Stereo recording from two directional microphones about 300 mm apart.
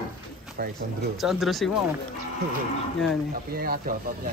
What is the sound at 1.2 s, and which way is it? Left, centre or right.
Speech, centre.